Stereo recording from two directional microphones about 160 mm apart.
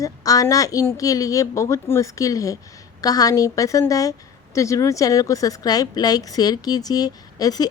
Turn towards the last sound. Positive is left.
turn(degrees=25)  # may be behind; listen again after turning